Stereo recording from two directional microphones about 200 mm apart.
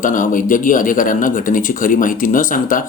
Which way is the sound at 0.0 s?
40° left (ahead or behind).